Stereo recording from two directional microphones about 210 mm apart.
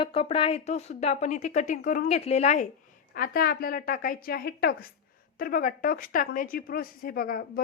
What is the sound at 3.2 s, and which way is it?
Speech, 45° left (ahead or behind).